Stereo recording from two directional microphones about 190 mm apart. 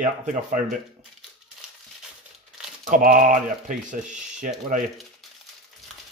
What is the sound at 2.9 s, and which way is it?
A man's voice, 45° right (ahead or behind).